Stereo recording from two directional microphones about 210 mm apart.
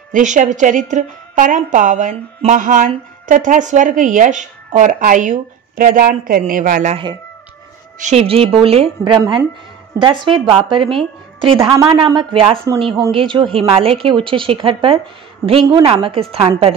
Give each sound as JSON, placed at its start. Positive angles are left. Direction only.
{"t": 0.1, "sound": "a woman's voice", "side_deg": -35}